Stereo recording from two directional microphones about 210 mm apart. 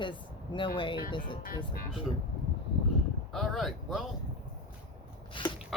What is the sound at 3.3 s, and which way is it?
Speech, centre (ahead or behind).